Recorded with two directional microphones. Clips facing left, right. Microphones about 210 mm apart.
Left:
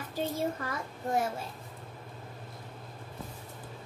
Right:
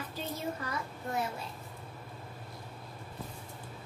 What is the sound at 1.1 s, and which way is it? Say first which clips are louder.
Speech: left 5 dB; 45° left (ahead or behind).